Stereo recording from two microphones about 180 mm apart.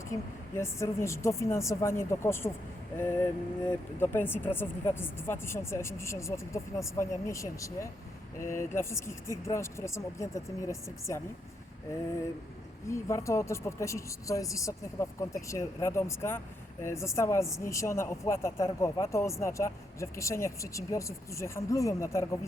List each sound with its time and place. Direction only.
0.1 s speech: 15° left (ahead or behind)
12.9 s speech: 15° left (ahead or behind)